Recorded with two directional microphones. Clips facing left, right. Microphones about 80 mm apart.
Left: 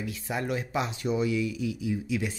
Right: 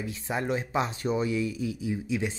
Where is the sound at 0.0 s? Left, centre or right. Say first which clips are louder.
Right 1 dB; right.